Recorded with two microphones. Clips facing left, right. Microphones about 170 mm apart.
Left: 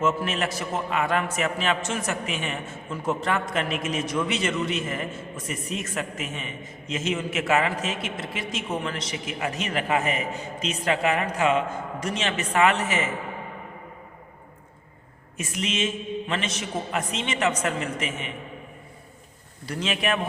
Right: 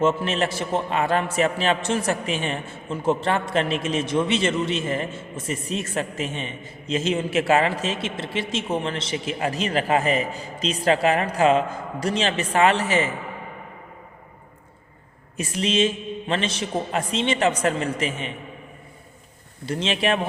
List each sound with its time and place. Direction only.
0.0 s a man's voice: 30° right (ahead or behind)
15.4 s a man's voice: 30° right (ahead or behind)
19.6 s a man's voice: 25° right (ahead or behind)